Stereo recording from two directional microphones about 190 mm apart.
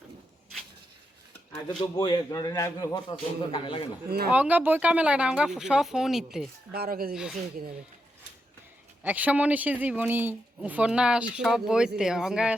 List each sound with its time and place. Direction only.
1.8 s a man's voice: 25° left (ahead or behind)
4.3 s speech: 10° right (ahead or behind)
6.7 s speech: 50° right (ahead or behind)
7.1 s speech: 5° right (ahead or behind)
9.0 s speech: 10° right (ahead or behind)